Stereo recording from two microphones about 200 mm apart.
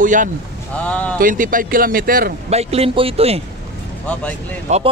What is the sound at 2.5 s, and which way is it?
Speech, 30° right (ahead or behind).